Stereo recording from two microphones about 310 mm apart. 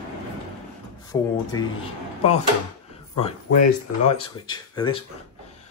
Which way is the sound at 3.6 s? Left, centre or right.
Centre.